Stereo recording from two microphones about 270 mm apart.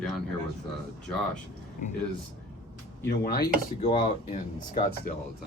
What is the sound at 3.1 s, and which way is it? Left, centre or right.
Speech, left.